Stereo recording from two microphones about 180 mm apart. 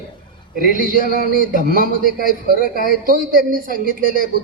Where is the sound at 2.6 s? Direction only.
50° left (ahead or behind).